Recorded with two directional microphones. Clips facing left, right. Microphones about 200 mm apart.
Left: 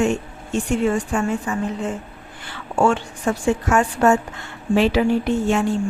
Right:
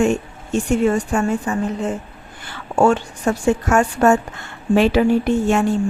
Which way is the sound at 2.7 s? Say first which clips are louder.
Right 3 dB; 40° right (ahead or behind).